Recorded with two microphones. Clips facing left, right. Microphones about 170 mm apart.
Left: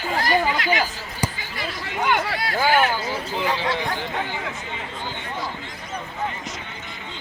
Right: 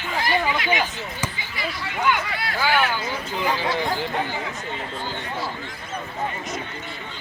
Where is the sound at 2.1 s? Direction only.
50° left (ahead or behind).